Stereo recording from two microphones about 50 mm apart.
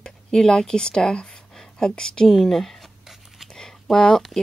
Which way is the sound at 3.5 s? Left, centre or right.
Centre.